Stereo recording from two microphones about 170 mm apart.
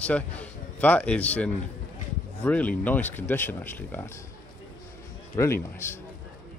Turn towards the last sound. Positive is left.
turn(degrees=15)  # may be behind; listen again after turning